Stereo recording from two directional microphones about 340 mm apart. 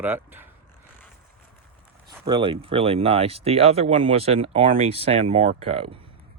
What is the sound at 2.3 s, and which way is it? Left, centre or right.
Speech, centre.